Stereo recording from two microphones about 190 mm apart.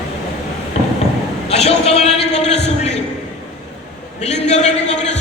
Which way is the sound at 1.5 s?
35° left (ahead or behind).